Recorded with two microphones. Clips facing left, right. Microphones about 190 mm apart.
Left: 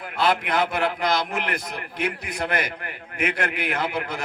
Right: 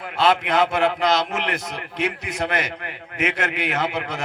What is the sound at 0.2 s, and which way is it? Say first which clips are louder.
A man's voice: right 3 dB; 25° right (ahead or behind).